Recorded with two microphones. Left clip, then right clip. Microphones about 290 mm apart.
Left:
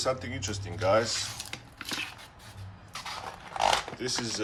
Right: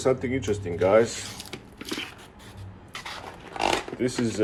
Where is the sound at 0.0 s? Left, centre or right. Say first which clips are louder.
Right 6 dB; centre.